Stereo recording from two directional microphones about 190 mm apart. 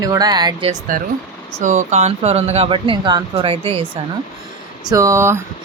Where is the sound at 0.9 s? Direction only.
45° right (ahead or behind); by 4.0 s 30° right (ahead or behind).